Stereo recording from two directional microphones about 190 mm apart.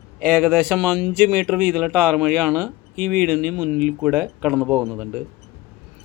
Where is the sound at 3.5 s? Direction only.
10° right (ahead or behind).